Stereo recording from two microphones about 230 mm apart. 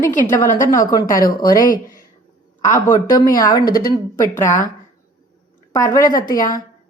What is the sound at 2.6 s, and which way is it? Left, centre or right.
Speech, centre.